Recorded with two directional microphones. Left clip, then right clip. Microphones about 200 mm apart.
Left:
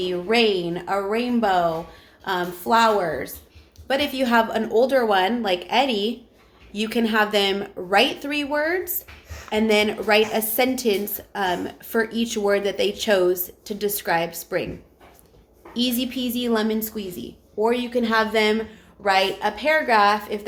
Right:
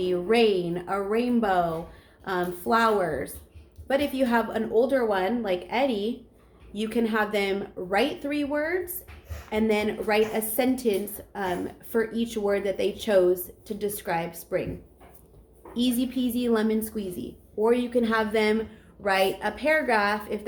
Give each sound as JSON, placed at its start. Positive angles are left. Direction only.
{"t": 0.0, "sound": "a woman's voice", "side_deg": 10}
{"t": 3.8, "sound": "a woman's voice", "side_deg": 20}
{"t": 15.7, "sound": "a woman's voice", "side_deg": 20}